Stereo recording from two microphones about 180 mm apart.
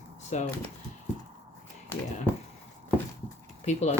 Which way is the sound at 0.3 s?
40° left (ahead or behind).